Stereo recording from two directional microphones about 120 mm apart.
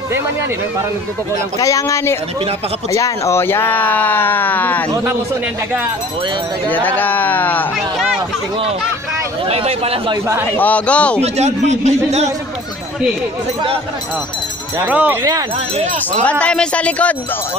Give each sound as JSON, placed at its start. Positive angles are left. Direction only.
{"t": 1.6, "sound": "speech", "side_deg": 25}
{"t": 6.7, "sound": "speech", "side_deg": 15}
{"t": 9.5, "sound": "speech", "side_deg": -55}
{"t": 10.5, "sound": "speech", "side_deg": 15}
{"t": 11.3, "sound": "speech", "side_deg": -70}
{"t": 14.9, "sound": "speech", "side_deg": -15}
{"t": 16.3, "sound": "speech", "side_deg": 10}